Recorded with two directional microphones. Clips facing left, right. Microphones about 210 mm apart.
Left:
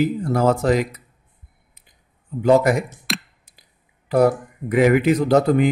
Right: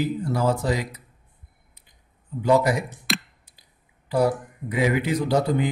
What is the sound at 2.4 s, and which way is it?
Speech, 50° left (ahead or behind).